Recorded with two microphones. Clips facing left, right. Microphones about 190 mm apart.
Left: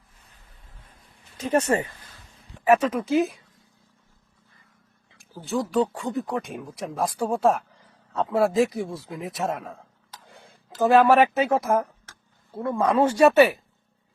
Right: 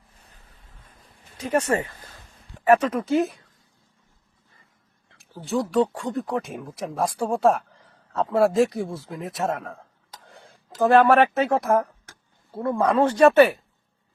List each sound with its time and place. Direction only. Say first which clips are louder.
1.4 s speech: left 1 dB; 25° left (ahead or behind)
2.6 s speech: right 1 dB; 5° left (ahead or behind)
5.0 s speech: right 2 dB; centre (ahead or behind)